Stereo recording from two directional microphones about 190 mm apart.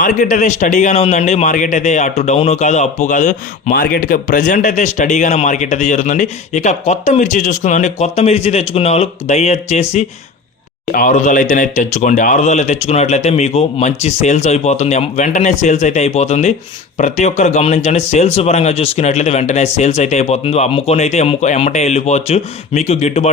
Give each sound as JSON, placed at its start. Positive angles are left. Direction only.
{"t": 0.0, "sound": "speech", "side_deg": 45}